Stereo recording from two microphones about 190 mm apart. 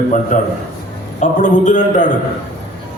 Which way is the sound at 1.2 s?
40° left (ahead or behind).